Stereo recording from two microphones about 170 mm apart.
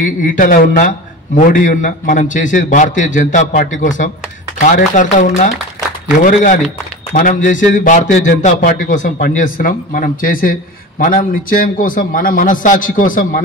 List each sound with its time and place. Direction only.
0.0 s a man's voice: 50° left (ahead or behind)